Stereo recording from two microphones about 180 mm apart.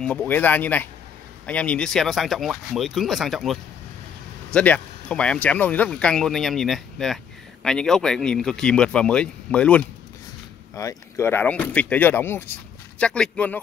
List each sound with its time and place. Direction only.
0.0 s speech: 5° left (ahead or behind)
4.6 s speech: 5° left (ahead or behind)